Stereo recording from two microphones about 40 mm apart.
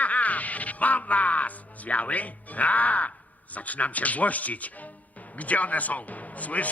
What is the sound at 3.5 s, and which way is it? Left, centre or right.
Speech, left.